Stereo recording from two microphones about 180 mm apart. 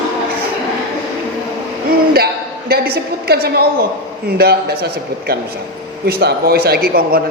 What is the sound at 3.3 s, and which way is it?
A man's voice, 60° right (ahead or behind).